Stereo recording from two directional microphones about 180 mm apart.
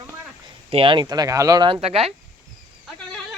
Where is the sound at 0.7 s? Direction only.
30° right (ahead or behind).